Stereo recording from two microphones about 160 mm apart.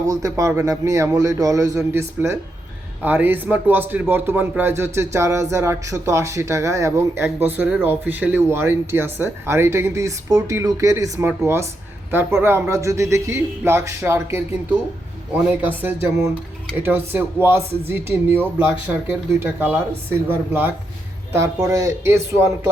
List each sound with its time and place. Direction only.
0.0 s a man's voice: 20° right (ahead or behind)